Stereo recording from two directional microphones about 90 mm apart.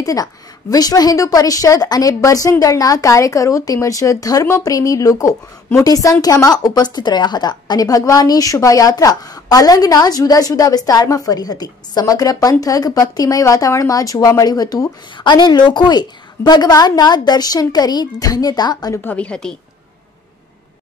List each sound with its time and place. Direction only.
0.0 s a woman's voice: 40° left (ahead or behind)
18.9 s a woman's voice: 15° left (ahead or behind)